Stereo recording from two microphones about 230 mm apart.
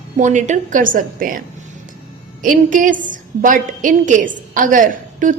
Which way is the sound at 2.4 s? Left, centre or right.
Right.